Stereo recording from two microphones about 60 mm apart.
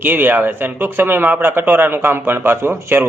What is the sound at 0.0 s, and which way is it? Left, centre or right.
A man's voice, right.